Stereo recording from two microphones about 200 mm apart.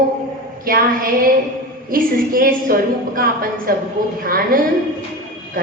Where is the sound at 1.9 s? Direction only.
45° right (ahead or behind).